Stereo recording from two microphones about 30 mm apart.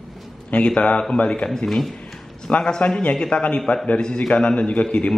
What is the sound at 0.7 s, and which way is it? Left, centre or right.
Speech, left.